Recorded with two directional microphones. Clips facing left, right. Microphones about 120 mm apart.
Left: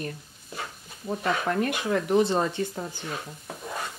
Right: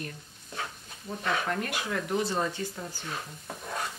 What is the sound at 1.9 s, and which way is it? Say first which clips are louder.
Speech: left 8 dB; 25° left (ahead or behind).